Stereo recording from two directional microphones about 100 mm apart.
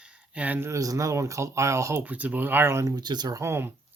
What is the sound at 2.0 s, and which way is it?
Speech, 15° right (ahead or behind).